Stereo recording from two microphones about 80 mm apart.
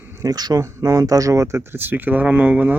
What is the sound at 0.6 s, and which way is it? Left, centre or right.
Speech, right.